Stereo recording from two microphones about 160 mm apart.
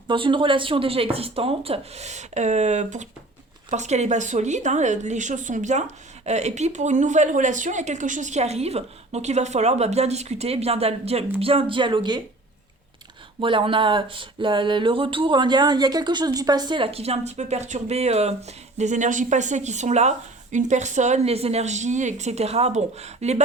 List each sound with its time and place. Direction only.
0.1 s speech: 30° right (ahead or behind)
13.4 s speech: 30° right (ahead or behind)